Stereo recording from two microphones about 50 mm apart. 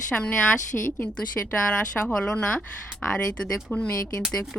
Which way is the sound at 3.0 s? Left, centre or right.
Left.